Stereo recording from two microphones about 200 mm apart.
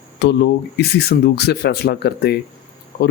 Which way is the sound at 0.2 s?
60° left (ahead or behind).